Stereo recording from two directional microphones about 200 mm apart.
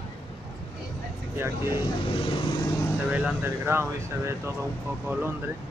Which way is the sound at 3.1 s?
5° right (ahead or behind).